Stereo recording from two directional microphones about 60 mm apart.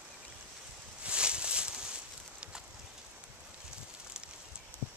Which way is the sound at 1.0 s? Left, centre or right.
Centre.